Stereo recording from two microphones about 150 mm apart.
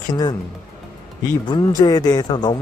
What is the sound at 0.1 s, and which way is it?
Speech, 25° left (ahead or behind).